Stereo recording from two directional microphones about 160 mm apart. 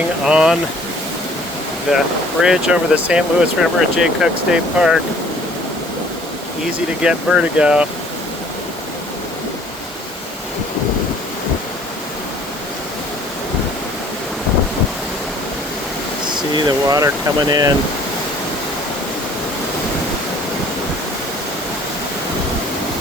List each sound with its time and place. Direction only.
0.3 s speech: 5° right (ahead or behind)
1.9 s speech: centre (ahead or behind)
7.0 s speech: 5° right (ahead or behind)
16.3 s speech: 25° right (ahead or behind)